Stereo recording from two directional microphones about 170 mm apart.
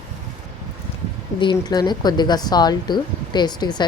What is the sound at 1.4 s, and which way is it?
Speech, 25° left (ahead or behind).